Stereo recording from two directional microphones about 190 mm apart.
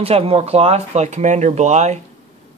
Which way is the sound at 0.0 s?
30° right (ahead or behind).